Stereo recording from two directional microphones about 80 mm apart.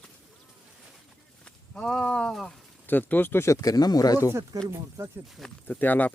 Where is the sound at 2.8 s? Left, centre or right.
Left.